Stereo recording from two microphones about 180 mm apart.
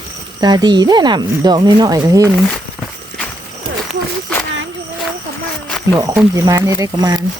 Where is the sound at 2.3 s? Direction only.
Centre (ahead or behind).